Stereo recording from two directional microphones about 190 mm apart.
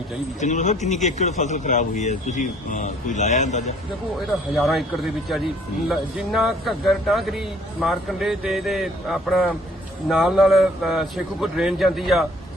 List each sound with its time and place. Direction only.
0.3 s speech: 40° left (ahead or behind)
4.5 s a man's voice: centre (ahead or behind)
5.9 s a man's voice: centre (ahead or behind)